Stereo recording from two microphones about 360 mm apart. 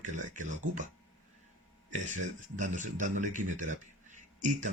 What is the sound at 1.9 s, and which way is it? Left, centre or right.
A man's voice, centre.